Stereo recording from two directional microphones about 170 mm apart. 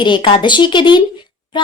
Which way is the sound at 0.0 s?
30° left (ahead or behind).